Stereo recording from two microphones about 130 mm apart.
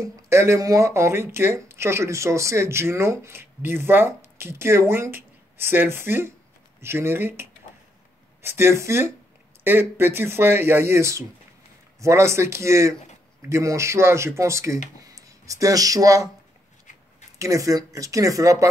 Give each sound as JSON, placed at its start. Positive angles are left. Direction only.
{"t": 0.0, "sound": "speech", "side_deg": -20}
{"t": 17.4, "sound": "speech", "side_deg": -25}